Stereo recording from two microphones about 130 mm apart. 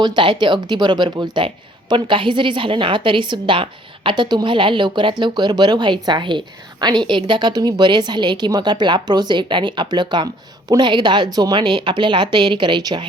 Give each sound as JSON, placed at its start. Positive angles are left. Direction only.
{"t": 0.0, "sound": "a woman's voice", "side_deg": -35}